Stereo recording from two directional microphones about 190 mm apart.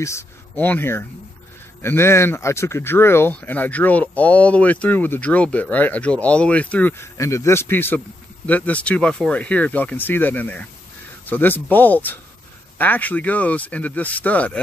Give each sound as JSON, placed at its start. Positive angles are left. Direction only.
{"t": 0.0, "sound": "speech", "side_deg": 10}